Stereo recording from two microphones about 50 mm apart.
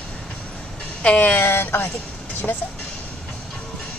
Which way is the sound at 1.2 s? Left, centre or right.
Left.